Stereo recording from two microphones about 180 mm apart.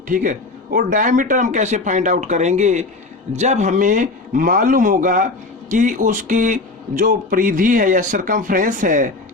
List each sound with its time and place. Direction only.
0.1 s speech: 50° right (ahead or behind)